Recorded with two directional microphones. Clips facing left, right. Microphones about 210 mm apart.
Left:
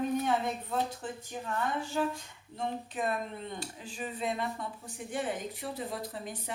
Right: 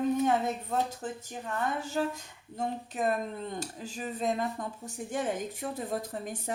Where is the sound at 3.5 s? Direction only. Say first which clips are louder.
Right 3 dB; 45° right (ahead or behind).